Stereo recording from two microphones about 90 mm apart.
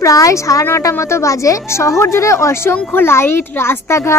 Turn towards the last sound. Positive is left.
turn(degrees=25)  # may be behind; listen again after turning